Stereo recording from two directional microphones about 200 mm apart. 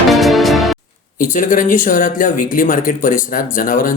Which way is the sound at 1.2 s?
40° left (ahead or behind).